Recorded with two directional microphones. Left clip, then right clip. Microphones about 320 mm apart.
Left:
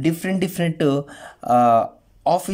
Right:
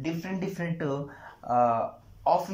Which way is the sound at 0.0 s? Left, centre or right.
Left.